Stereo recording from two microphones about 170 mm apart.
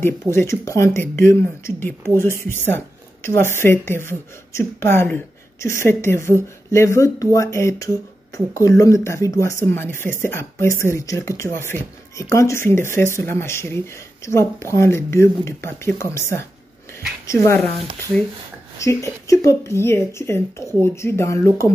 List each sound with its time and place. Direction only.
0.3 s speech: 15° left (ahead or behind)
18.8 s speech: 15° left (ahead or behind)